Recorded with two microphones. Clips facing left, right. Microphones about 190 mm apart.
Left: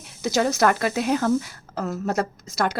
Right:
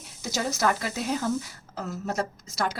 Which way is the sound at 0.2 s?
70° left (ahead or behind).